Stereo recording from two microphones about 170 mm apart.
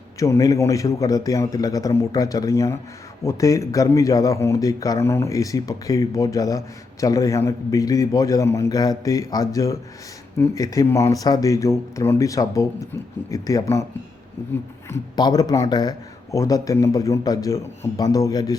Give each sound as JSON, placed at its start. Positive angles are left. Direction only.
{"t": 0.2, "sound": "speech", "side_deg": 20}
{"t": 14.8, "sound": "speech", "side_deg": 20}